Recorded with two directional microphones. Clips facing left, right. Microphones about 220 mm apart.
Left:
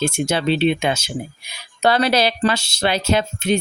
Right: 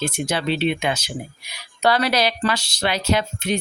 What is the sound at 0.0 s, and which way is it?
Speech, 25° left (ahead or behind).